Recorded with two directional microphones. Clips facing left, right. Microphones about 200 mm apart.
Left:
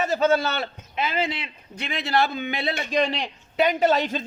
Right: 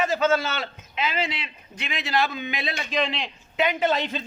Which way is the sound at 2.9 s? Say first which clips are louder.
Left 3 dB; 40° left (ahead or behind).